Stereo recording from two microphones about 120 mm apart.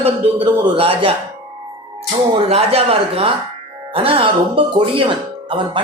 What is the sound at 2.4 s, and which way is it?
Speech, 55° right (ahead or behind).